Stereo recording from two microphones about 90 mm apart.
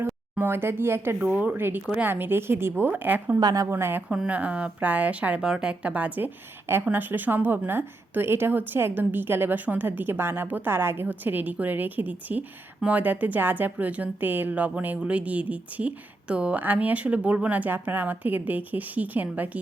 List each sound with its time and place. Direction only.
0.0 s a woman's voice: 25° right (ahead or behind)
3.4 s a woman's voice: 40° right (ahead or behind)
3.8 s a woman's voice: 25° right (ahead or behind)
4.1 s a woman's voice: 15° right (ahead or behind)